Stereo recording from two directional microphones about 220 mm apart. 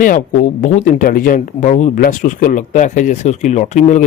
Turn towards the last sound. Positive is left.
turn(degrees=35)  # may be behind; listen again after turning